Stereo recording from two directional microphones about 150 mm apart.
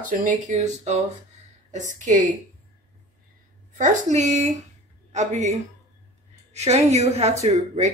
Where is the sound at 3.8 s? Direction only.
55° right (ahead or behind).